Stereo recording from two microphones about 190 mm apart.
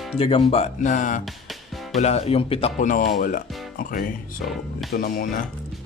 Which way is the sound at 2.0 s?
35° left (ahead or behind).